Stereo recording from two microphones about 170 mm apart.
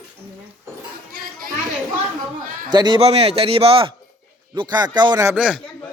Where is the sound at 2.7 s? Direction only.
25° right (ahead or behind).